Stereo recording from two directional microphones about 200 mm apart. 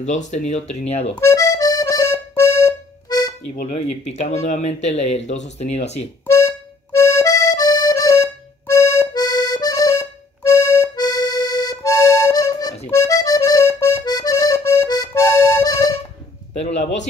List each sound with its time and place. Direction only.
0.0 s speech: 35° left (ahead or behind)
1.2 s accordion: 15° left (ahead or behind)
3.6 s speech: 35° left (ahead or behind)
6.2 s accordion: 15° left (ahead or behind)